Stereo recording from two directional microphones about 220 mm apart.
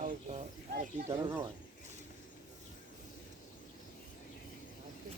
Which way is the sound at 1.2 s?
10° right (ahead or behind).